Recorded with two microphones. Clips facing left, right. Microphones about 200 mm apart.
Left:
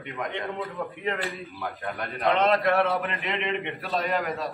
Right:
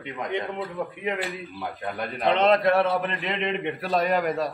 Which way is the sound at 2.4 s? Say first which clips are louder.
Right 3 dB; 20° right (ahead or behind).